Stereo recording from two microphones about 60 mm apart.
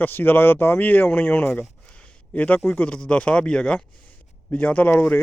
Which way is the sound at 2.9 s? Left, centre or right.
Centre.